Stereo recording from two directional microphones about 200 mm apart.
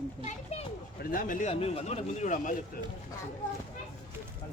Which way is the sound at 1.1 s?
45° left (ahead or behind).